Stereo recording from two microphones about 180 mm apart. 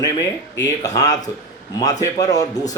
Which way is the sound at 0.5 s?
20° left (ahead or behind).